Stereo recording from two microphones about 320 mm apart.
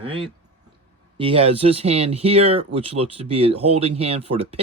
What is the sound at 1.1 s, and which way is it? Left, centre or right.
Speech, centre.